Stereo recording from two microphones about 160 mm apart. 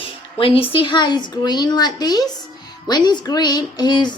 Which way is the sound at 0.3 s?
35° left (ahead or behind).